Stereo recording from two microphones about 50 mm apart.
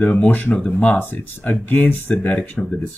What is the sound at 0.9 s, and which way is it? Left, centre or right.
Speech, left.